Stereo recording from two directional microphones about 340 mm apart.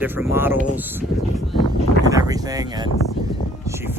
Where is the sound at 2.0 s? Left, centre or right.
Centre.